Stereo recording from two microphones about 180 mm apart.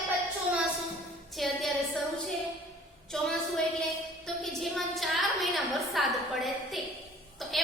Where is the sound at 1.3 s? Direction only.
Centre (ahead or behind).